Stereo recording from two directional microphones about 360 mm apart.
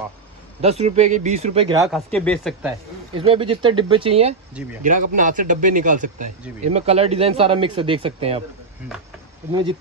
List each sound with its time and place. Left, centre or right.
0.6 s speech: centre
1.9 s speech: centre
9.5 s speech: centre